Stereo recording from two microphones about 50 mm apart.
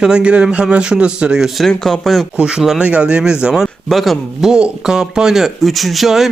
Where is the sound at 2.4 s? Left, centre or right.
Centre.